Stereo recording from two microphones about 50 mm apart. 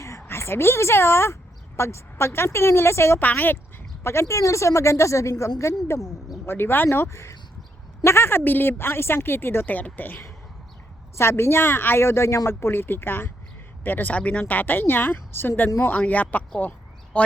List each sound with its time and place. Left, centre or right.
0.0 s a sound: left
0.3 s speech: left
3.2 s speech: left
4.0 s speech: left
6.4 s speech: left
6.8 s speech: left
9.6 s speech: left
11.2 s speech: left
12.0 s speech: left
14.1 s speech: left
15.8 s speech: left
17.1 s speech: left